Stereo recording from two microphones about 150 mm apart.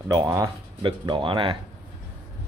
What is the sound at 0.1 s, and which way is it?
Speech, 20° right (ahead or behind).